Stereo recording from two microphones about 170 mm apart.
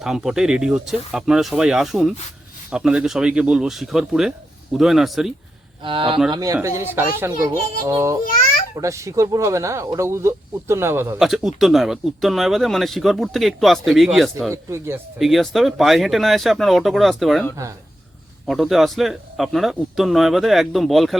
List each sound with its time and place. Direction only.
0.0 s speech: 5° right (ahead or behind)
5.8 s speech: 30° right (ahead or behind)
6.3 s speech: 20° right (ahead or behind)
11.2 s speech: centre (ahead or behind)
14.5 s speech: 15° right (ahead or behind)
15.2 s speech: centre (ahead or behind)
18.4 s speech: centre (ahead or behind)